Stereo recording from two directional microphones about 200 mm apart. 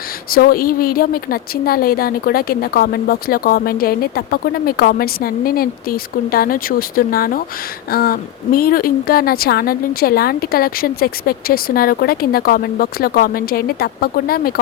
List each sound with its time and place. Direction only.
0.3 s a woman's voice: 45° left (ahead or behind)